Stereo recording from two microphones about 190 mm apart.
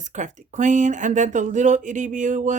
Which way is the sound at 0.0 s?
40° right (ahead or behind).